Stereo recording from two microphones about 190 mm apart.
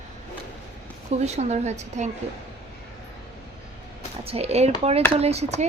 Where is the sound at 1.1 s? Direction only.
35° right (ahead or behind).